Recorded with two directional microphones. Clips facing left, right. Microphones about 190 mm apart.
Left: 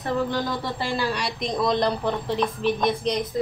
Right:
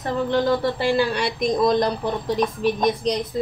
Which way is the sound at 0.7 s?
60° right (ahead or behind).